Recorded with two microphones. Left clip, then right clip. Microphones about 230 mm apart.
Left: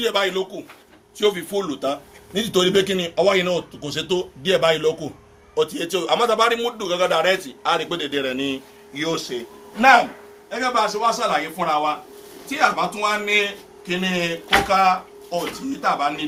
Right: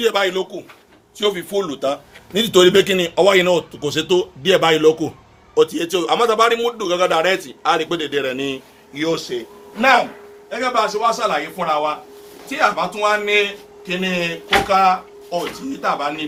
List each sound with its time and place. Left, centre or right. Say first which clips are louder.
0.0 s a man's voice: right 3 dB; right
1.2 s a man's voice: right 1 dB; right
9.0 s a man's voice: right 4 dB; right
10.5 s a man's voice: right 2 dB; centre